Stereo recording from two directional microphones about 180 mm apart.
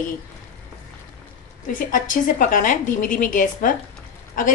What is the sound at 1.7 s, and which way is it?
A woman's voice, 45° left (ahead or behind).